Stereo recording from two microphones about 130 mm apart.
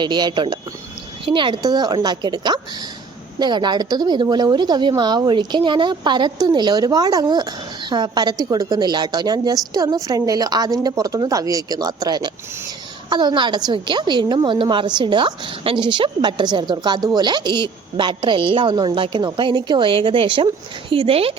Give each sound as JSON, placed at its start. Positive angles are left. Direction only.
{"t": 0.0, "sound": "a woman's voice", "side_deg": -35}